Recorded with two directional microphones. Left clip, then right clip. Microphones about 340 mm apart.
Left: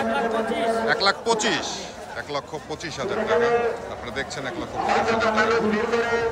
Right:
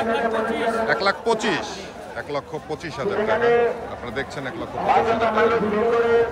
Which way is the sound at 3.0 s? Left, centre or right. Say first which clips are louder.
Right 1 dB; centre.